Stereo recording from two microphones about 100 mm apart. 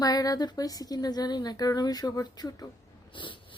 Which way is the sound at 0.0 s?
40° left (ahead or behind).